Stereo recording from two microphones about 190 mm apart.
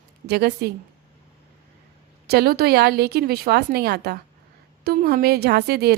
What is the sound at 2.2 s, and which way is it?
Speech, 55° right (ahead or behind).